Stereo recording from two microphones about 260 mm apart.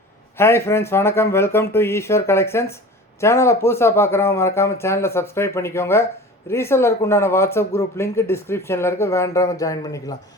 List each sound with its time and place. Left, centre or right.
0.3 s speech: centre